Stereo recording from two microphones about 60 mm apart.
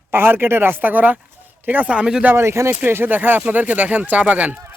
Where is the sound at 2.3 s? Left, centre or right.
Right.